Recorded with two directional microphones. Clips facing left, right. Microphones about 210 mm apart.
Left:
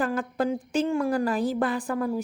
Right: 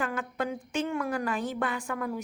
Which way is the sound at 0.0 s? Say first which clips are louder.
Left 6 dB; 35° left (ahead or behind).